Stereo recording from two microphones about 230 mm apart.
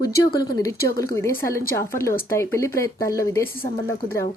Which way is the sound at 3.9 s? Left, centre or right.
Centre.